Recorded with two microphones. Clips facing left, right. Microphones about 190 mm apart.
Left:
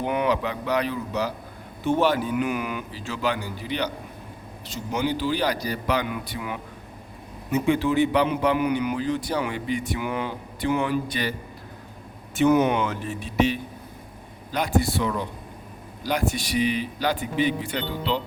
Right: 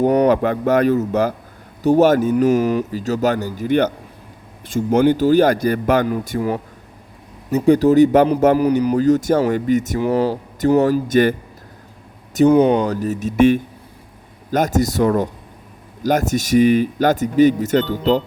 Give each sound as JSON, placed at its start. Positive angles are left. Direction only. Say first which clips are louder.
{"t": 0.0, "sound": "a man's voice", "louder": "right 10 dB", "side_deg": -40}
{"t": 12.3, "sound": "a man's voice", "louder": "right 7 dB", "side_deg": -35}